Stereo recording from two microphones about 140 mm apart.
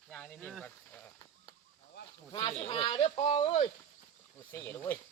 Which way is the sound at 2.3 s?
35° left (ahead or behind).